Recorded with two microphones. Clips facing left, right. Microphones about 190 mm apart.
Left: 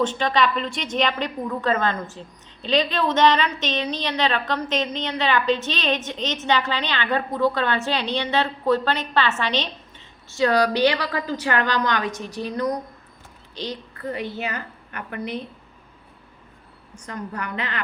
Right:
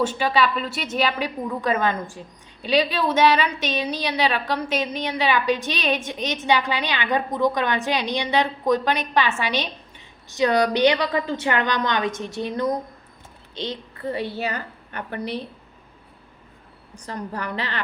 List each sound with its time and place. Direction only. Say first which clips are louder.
0.0 s a woman's voice: even; 10° right (ahead or behind); by 15.4 s 35° right (ahead or behind)
16.9 s a woman's voice: right 1 dB; 35° right (ahead or behind)